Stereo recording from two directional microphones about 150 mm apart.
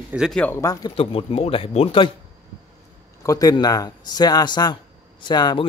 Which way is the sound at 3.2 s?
25° left (ahead or behind).